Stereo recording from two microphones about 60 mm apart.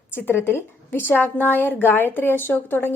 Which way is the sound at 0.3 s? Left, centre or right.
Left.